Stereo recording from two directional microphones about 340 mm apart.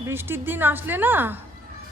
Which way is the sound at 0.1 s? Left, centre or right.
Centre.